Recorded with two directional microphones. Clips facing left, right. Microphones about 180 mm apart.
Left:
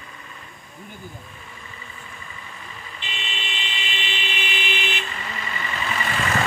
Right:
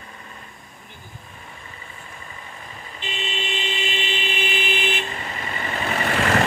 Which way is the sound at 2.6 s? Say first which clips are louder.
Right 5 dB; 40° right (ahead or behind).